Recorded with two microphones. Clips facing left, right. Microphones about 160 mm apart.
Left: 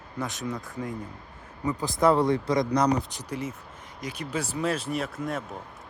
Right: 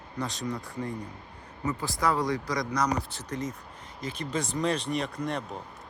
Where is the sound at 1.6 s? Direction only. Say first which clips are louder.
Left 5 dB; 15° left (ahead or behind).